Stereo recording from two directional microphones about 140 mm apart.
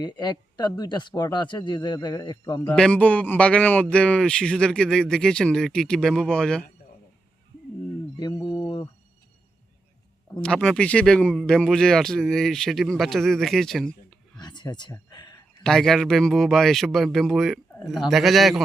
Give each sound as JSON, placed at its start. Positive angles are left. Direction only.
{"t": 0.0, "sound": "speech", "side_deg": 30}
{"t": 2.7, "sound": "a man's voice", "side_deg": 10}
{"t": 8.1, "sound": "mantra", "side_deg": 30}
{"t": 10.4, "sound": "a man's voice", "side_deg": 5}
{"t": 14.4, "sound": "a sound", "side_deg": 30}
{"t": 15.6, "sound": "a man's voice", "side_deg": 5}